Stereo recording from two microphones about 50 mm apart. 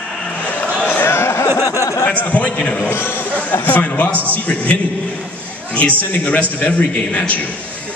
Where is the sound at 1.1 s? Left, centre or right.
Left.